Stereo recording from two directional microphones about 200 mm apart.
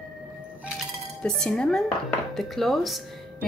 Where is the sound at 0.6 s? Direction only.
Centre (ahead or behind).